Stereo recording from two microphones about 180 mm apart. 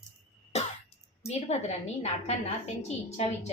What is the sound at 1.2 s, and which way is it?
A woman's voice, 35° left (ahead or behind).